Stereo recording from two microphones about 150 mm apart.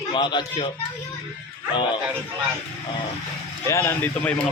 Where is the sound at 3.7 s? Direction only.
15° left (ahead or behind).